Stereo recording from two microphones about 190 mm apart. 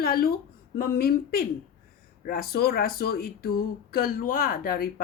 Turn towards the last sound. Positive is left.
turn(degrees=50)  # may be behind; listen again after turning